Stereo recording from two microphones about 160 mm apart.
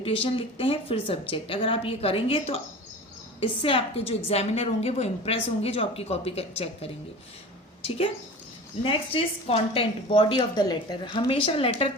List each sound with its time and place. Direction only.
0.0 s a woman's voice: 35° left (ahead or behind)